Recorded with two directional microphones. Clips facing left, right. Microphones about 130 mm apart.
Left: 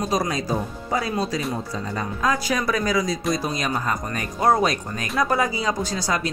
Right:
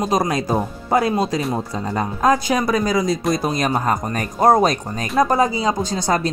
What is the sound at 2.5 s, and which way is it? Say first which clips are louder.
Speech: right 4 dB; 30° right (ahead or behind).